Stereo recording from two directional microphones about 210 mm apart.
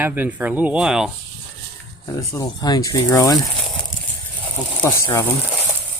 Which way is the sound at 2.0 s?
15° left (ahead or behind).